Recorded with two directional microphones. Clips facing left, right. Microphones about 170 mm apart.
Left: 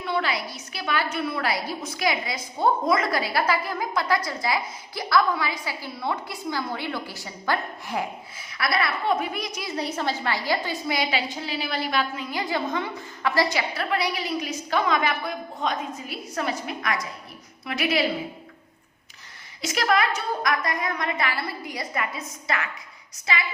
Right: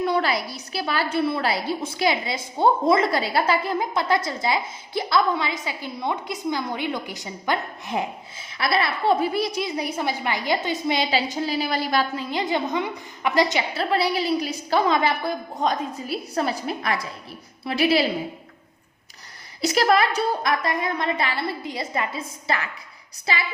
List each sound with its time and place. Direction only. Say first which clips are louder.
0.0 s a woman's voice: right 4 dB; 40° right (ahead or behind)
9.6 s a woman's voice: right 1 dB; 10° right (ahead or behind)
11.3 s a woman's voice: right 5 dB; 40° right (ahead or behind)
12.3 s a woman's voice: right 3 dB; 20° right (ahead or behind)
19.6 s a woman's voice: right 4 dB; 35° right (ahead or behind)